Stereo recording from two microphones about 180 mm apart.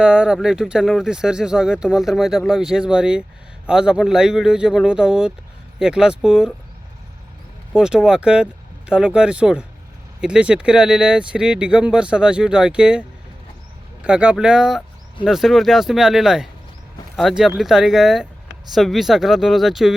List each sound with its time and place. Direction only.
0.0 s speech: 5° right (ahead or behind)
7.7 s speech: 5° right (ahead or behind)